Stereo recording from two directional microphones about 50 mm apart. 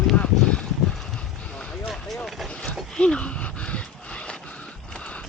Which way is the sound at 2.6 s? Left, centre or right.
Left.